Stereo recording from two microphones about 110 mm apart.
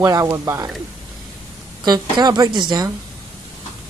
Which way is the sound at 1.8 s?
40° right (ahead or behind).